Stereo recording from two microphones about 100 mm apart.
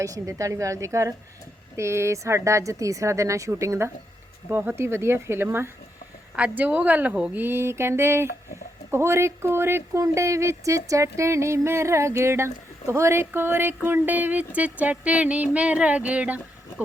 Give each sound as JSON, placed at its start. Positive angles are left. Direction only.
{"t": 0.0, "sound": "a woman's voice", "side_deg": -35}
{"t": 7.4, "sound": "speech", "side_deg": -25}